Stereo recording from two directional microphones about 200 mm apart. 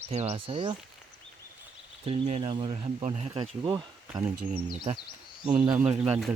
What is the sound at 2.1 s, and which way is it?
Speech, 30° right (ahead or behind).